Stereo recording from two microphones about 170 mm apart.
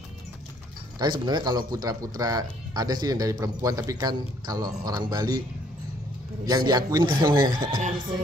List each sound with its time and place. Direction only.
1.2 s speech: 25° right (ahead or behind)
6.4 s speech: 20° right (ahead or behind)